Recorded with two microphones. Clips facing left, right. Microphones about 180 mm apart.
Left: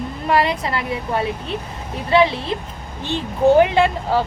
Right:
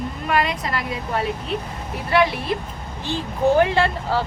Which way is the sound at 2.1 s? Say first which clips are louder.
Left 3 dB; 25° left (ahead or behind).